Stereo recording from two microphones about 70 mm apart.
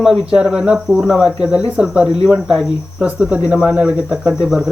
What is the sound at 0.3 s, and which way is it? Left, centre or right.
Speech, centre.